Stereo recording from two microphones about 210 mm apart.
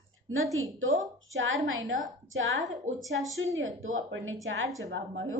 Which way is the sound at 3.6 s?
70° right (ahead or behind).